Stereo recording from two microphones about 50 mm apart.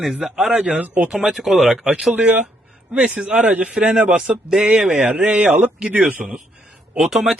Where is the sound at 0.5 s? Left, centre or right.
Right.